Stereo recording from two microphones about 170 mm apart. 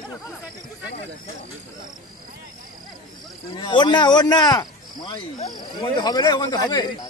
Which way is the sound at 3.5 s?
25° left (ahead or behind).